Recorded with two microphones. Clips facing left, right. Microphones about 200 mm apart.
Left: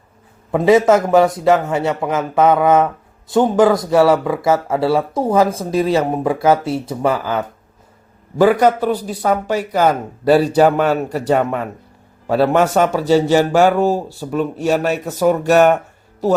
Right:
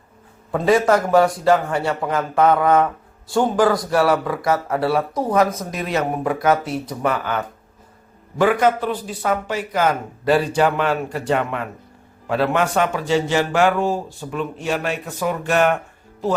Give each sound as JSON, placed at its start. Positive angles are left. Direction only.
{"t": 0.5, "sound": "a man's voice", "side_deg": 20}